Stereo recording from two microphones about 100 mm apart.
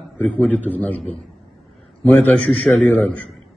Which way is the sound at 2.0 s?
10° left (ahead or behind).